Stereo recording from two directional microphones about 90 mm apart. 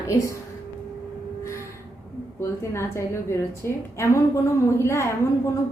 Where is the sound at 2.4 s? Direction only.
30° left (ahead or behind).